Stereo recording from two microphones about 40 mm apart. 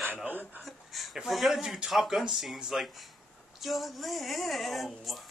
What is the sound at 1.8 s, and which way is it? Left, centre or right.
Speech, right.